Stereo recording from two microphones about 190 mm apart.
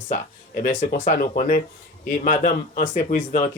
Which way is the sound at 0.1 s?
45° left (ahead or behind).